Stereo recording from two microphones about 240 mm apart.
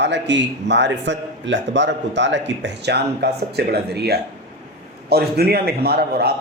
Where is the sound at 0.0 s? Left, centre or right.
Right.